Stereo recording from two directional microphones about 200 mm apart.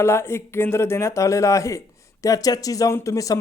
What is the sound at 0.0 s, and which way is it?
Speech, 10° left (ahead or behind).